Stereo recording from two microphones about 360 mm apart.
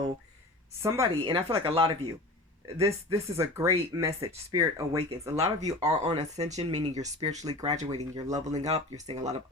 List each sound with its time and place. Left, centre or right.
0.8 s speech: centre